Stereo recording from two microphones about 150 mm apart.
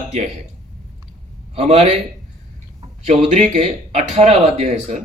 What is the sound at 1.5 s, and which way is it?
Speech, 45° right (ahead or behind).